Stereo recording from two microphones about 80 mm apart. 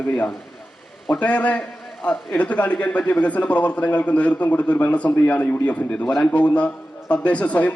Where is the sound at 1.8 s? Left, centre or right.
Centre.